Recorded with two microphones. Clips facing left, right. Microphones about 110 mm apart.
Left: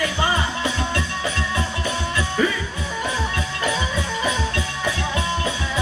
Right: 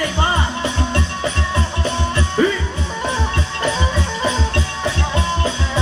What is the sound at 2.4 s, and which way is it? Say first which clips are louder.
Music: right 5 dB; 30° right (ahead or behind).